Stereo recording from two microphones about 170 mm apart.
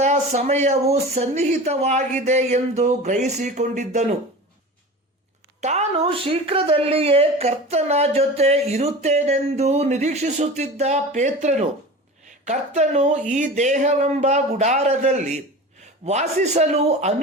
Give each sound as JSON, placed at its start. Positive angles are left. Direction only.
{"t": 0.0, "sound": "speech", "side_deg": -40}
{"t": 5.5, "sound": "a woman's voice", "side_deg": -40}